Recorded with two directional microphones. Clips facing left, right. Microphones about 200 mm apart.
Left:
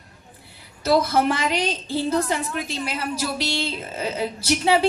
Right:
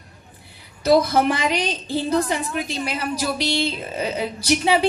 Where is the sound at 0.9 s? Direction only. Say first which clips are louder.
Right 2 dB; 15° right (ahead or behind).